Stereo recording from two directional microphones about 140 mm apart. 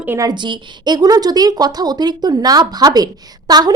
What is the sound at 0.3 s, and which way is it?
A woman's voice, 35° right (ahead or behind).